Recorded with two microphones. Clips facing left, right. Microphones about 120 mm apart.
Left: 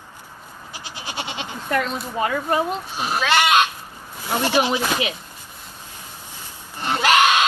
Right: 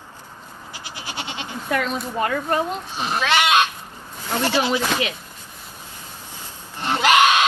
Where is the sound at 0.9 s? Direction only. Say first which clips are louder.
Left 2 dB; 15° left (ahead or behind).